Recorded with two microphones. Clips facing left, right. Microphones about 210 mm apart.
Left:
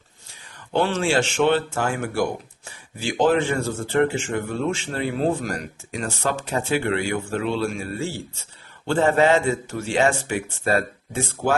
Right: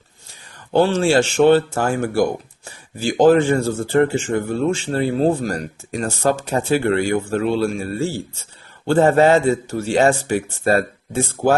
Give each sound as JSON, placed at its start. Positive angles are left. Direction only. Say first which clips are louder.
{"t": 0.7, "sound": "speech", "louder": "right 6 dB", "side_deg": -35}